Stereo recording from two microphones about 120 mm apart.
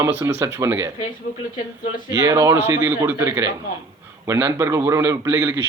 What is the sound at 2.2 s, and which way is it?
A man's voice, 25° right (ahead or behind).